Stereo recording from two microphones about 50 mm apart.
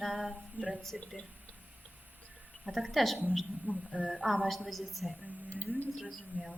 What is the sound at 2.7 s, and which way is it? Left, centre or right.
Speech, centre.